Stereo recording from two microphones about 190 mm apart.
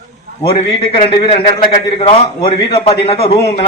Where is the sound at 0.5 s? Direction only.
25° left (ahead or behind).